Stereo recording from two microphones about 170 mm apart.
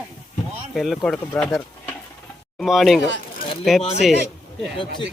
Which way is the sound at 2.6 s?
Centre (ahead or behind).